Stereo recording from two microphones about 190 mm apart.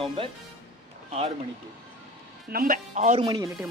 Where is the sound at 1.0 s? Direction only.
30° right (ahead or behind).